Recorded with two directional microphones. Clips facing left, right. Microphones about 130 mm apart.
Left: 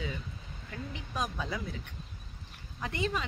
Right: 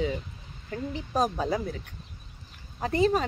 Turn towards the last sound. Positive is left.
turn(degrees=-40)  # may be behind; listen again after turning